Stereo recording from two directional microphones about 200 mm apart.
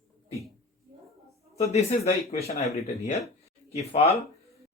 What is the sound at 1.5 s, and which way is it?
Speech, 30° left (ahead or behind).